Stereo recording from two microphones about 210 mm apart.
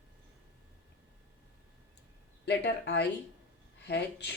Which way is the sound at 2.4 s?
55° left (ahead or behind).